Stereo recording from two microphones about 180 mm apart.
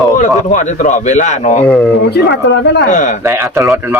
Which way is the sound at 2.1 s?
75° left (ahead or behind).